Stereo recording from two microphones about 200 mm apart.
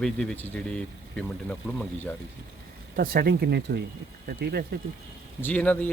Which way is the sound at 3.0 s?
50° right (ahead or behind).